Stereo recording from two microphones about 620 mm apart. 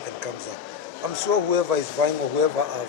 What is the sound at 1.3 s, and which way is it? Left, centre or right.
Speech, right.